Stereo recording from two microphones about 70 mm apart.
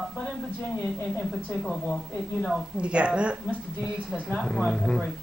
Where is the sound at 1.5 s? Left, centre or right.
Centre.